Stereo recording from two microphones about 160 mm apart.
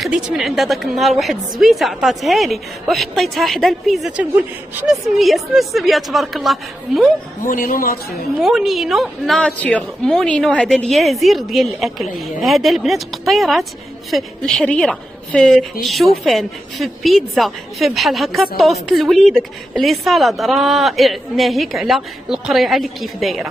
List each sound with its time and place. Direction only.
0.0 s a woman's voice: centre (ahead or behind)
7.4 s a man's voice: 60° left (ahead or behind)
8.4 s a woman's voice: centre (ahead or behind)